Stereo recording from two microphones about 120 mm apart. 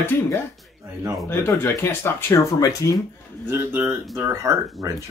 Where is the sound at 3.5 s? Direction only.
20° right (ahead or behind).